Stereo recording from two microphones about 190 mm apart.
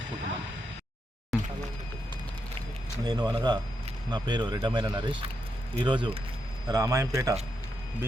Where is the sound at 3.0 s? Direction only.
20° right (ahead or behind).